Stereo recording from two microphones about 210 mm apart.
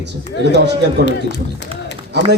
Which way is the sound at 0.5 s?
55° right (ahead or behind).